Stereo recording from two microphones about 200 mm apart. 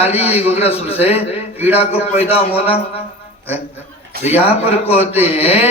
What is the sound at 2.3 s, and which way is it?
Speech, 30° left (ahead or behind).